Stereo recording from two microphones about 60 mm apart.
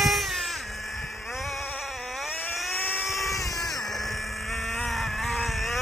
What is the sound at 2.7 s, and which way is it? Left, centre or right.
Vehicle, left.